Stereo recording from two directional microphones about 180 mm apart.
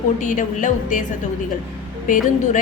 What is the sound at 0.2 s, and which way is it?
Speech, 45° left (ahead or behind).